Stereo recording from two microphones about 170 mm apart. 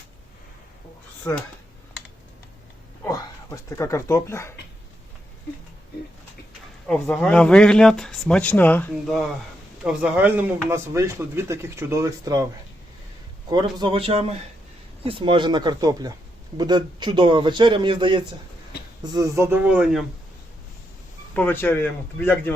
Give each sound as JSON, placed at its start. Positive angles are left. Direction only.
{"t": 3.0, "sound": "speech", "side_deg": 20}
{"t": 6.8, "sound": "speech", "side_deg": 5}
{"t": 9.8, "sound": "speech", "side_deg": -10}
{"t": 13.5, "sound": "a man's voice", "side_deg": -25}
{"t": 19.6, "sound": "speech", "side_deg": -5}
{"t": 21.3, "sound": "a man's voice", "side_deg": 10}